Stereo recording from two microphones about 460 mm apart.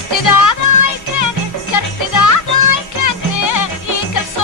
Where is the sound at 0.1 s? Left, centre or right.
Left.